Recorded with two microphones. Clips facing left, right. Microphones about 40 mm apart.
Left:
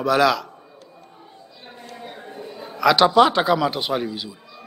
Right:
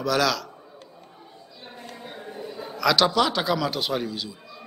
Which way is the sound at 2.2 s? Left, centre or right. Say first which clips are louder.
Even; centre.